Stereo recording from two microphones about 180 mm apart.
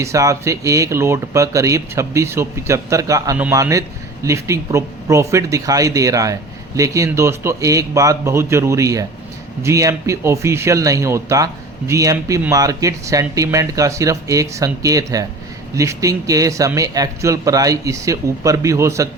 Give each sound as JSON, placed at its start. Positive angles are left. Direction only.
{"t": 0.0, "sound": "speech", "side_deg": -15}